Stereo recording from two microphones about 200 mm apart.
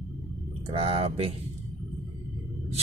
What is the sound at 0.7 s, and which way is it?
Speech, 30° right (ahead or behind).